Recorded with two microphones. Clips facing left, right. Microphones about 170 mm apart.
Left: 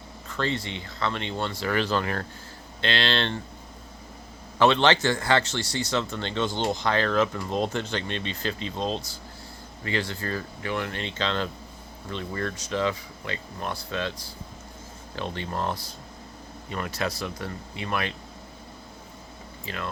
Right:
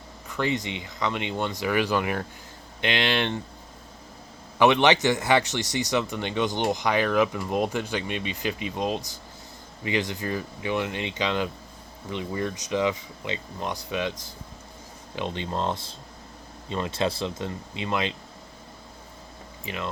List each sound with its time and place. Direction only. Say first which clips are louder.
0.3 s speech: right 2 dB; 15° right (ahead or behind)
4.6 s speech: right 1 dB; 15° right (ahead or behind)
15.1 s speech: right 2 dB; 20° right (ahead or behind)
19.6 s speech: right 2 dB; 20° right (ahead or behind)